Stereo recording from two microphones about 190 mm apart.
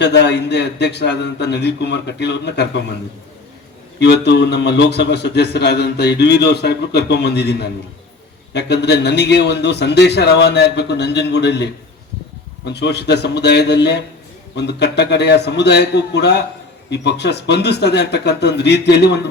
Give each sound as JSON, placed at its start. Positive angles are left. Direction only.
{"t": 0.0, "sound": "a man's voice", "side_deg": 65}
{"t": 4.0, "sound": "a man's voice", "side_deg": 65}